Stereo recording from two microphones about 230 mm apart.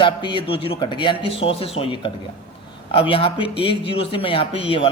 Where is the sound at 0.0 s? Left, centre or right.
Centre.